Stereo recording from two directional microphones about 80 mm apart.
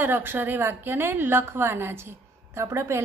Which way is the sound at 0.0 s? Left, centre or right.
Right.